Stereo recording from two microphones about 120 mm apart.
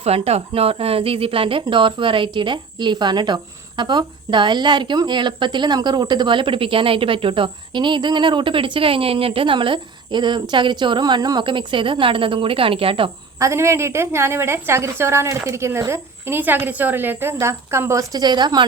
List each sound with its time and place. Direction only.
0.0 s speech: 60° right (ahead or behind)
13.4 s a woman's voice: 25° right (ahead or behind)